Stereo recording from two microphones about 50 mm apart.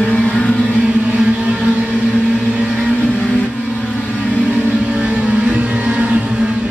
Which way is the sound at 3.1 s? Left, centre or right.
Left.